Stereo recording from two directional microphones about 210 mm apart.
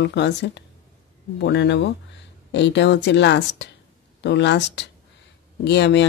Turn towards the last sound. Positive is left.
turn(degrees=55)  # may be behind; listen again after turning